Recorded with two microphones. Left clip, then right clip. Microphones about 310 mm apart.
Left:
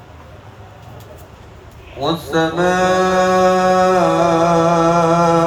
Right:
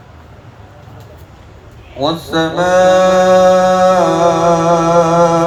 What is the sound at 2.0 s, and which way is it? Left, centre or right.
Music, right.